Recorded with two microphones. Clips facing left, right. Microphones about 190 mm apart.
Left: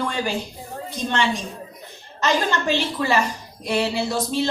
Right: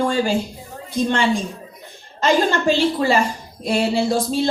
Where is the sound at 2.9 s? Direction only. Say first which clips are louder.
Right 3 dB; 30° right (ahead or behind).